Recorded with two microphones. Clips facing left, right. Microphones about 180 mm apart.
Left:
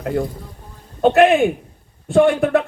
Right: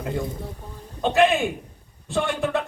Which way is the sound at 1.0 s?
60° left (ahead or behind).